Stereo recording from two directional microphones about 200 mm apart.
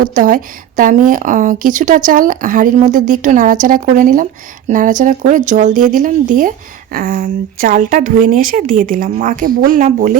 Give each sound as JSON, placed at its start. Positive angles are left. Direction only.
{"t": 0.1, "sound": "a woman's voice", "side_deg": -40}